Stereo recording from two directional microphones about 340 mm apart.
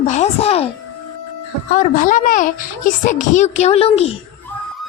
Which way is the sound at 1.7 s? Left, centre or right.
Left.